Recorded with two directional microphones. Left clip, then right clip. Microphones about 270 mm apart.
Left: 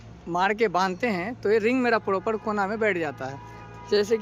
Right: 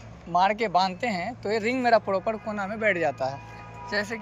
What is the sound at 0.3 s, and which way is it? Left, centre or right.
Speech, centre.